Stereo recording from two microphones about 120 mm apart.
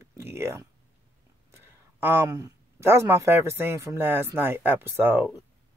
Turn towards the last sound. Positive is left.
turn(degrees=-15)  # may be behind; listen again after turning